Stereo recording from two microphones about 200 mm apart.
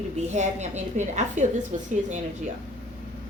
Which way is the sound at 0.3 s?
35° right (ahead or behind).